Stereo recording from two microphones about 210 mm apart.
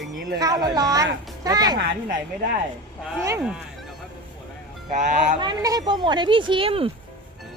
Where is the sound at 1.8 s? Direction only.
40° right (ahead or behind).